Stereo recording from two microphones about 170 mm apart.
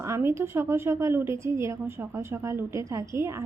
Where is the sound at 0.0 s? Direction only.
15° right (ahead or behind).